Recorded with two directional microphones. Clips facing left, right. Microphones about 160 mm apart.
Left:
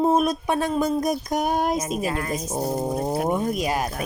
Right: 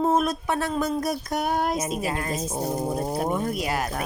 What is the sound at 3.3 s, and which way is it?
Speech, 15° left (ahead or behind).